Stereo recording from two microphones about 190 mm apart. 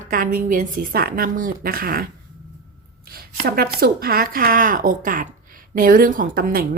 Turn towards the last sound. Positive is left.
turn(degrees=-50)  # may be behind; listen again after turning